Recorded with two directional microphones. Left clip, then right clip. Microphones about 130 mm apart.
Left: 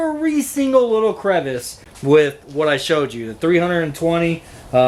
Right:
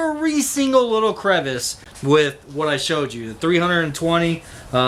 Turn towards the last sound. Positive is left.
turn(degrees=-15)  # may be behind; listen again after turning